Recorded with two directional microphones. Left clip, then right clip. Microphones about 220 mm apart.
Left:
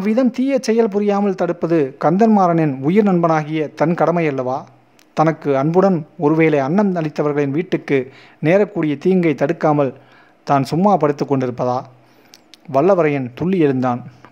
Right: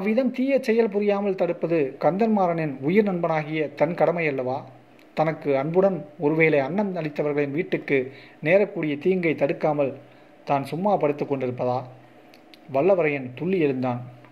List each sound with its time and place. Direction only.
0.0 s a man's voice: 25° left (ahead or behind)